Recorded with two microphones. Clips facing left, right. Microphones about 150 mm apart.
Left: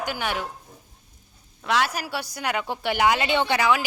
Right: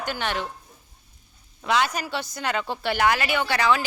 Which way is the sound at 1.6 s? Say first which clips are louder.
Right 1 dB; centre (ahead or behind).